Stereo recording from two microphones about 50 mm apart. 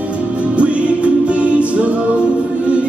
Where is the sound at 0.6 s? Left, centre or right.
Right.